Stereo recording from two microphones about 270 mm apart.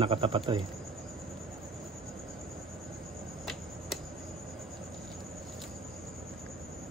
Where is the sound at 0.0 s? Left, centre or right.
Centre.